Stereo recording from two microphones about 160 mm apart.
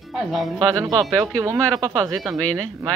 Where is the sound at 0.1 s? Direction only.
Centre (ahead or behind).